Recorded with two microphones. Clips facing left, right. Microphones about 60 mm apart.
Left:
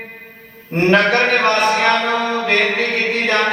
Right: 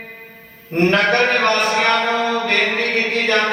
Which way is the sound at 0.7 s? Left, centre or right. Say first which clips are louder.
Left 2 dB; centre.